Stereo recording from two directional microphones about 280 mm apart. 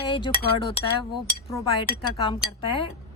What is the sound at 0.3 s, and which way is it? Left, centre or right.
Chink, left.